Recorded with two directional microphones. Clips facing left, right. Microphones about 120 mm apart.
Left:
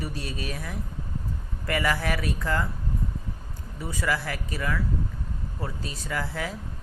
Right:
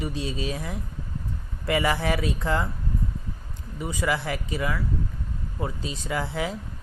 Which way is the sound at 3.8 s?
20° right (ahead or behind).